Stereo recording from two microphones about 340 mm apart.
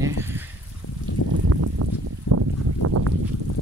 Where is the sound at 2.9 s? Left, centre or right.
Right.